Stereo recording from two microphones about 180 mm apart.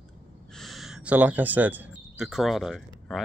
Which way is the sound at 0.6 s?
Centre (ahead or behind).